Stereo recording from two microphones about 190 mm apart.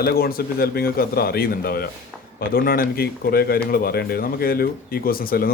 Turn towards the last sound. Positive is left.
turn(degrees=50)  # may be behind; listen again after turning